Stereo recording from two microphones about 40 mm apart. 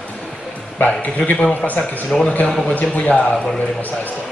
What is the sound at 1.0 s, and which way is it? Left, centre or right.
A man's voice, left.